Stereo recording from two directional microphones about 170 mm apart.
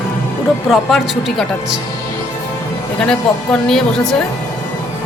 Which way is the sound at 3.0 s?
5° left (ahead or behind).